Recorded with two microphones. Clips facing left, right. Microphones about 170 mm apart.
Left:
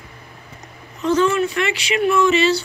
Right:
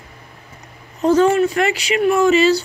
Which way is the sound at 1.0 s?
40° right (ahead or behind).